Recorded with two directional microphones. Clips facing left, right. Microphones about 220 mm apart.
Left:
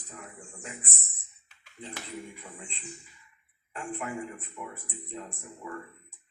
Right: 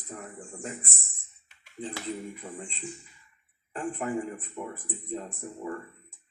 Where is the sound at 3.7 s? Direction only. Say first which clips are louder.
Right 5 dB; 40° right (ahead or behind).